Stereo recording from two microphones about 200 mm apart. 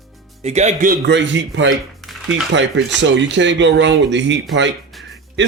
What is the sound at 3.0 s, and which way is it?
Speech, 65° right (ahead or behind).